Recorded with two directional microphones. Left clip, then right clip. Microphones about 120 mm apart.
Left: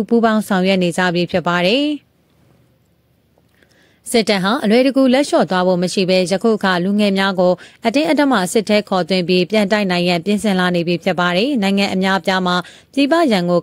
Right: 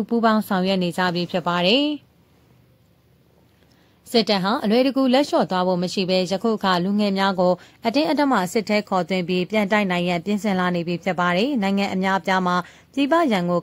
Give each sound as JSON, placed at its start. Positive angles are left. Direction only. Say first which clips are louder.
{"t": 0.0, "sound": "a woman's voice", "louder": "left 5 dB", "side_deg": 50}
{"t": 4.1, "sound": "a woman's voice", "louder": "left 4 dB", "side_deg": 50}